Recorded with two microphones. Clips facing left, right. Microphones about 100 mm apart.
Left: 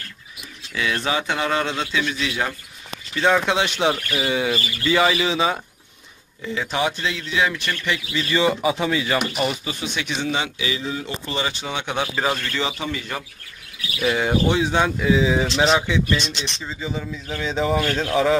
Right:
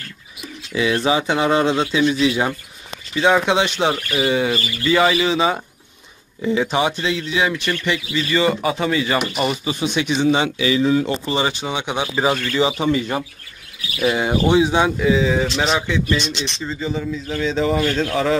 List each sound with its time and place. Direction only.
0.7 s speech: 20° right (ahead or behind)
3.2 s speech: 10° right (ahead or behind)
3.6 s speech: 5° left (ahead or behind)
6.5 s speech: 15° right (ahead or behind)
10.6 s speech: 70° right (ahead or behind)
11.3 s speech: 20° right (ahead or behind)
14.0 s speech: 10° right (ahead or behind)
15.0 s speech: centre (ahead or behind)